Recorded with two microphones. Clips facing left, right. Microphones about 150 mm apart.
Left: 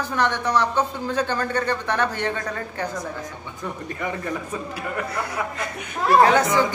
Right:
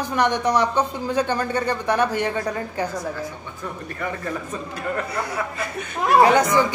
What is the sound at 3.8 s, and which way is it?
Speech, 15° left (ahead or behind).